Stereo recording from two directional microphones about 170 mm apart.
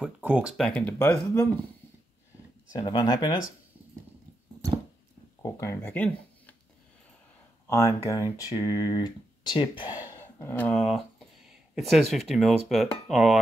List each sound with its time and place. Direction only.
0.0 s speech: 5° right (ahead or behind); by 1.5 s 10° left (ahead or behind)
2.7 s speech: 25° left (ahead or behind)
5.4 s a sound: 20° left (ahead or behind)
7.6 s speech: 15° left (ahead or behind)
10.1 s speech: 15° left (ahead or behind)